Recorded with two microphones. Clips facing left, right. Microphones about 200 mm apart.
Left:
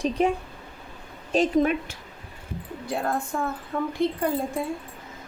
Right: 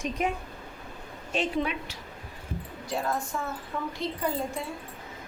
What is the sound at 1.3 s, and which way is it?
Speech, 40° left (ahead or behind).